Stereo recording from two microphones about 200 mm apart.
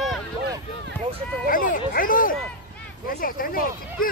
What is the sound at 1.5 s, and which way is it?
Speech, 45° left (ahead or behind).